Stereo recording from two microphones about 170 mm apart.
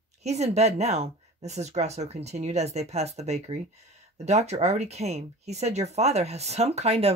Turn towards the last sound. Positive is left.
turn(degrees=-40)  # may be behind; listen again after turning